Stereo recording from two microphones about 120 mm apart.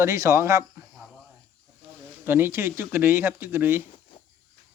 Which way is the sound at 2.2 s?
20° right (ahead or behind).